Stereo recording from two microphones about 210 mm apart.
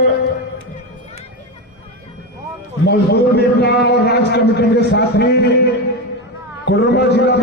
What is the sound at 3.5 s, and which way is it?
A man's voice, 50° left (ahead or behind).